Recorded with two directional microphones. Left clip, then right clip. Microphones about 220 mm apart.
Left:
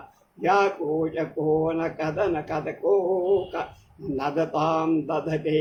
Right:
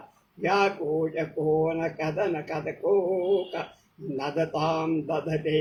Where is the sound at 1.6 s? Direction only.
15° left (ahead or behind).